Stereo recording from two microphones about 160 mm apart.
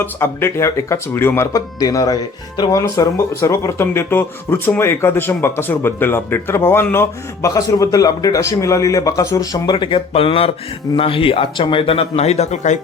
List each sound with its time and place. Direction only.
0.0 s speech: 15° left (ahead or behind); by 12.8 s 45° left (ahead or behind)